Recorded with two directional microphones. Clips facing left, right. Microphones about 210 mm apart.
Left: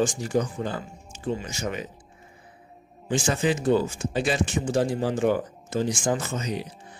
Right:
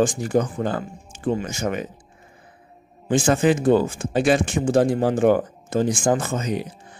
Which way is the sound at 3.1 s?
55° right (ahead or behind).